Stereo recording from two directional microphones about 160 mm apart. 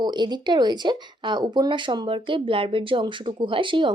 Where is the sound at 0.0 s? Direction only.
25° right (ahead or behind).